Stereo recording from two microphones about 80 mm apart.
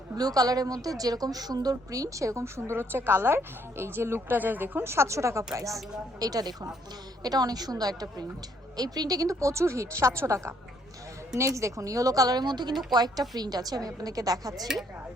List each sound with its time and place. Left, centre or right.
0.2 s a woman's voice: right